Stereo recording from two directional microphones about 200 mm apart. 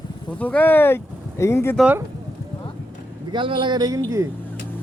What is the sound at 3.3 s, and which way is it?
Speech, 25° right (ahead or behind).